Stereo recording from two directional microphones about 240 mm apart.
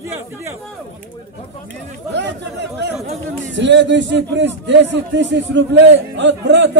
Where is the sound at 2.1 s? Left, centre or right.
Right.